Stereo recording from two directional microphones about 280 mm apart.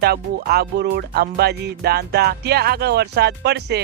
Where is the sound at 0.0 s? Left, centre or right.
Right.